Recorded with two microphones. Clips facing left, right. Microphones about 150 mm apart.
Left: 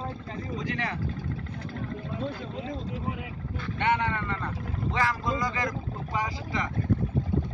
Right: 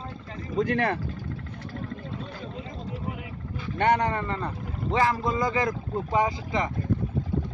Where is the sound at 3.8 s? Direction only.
40° right (ahead or behind); by 6.7 s 20° right (ahead or behind).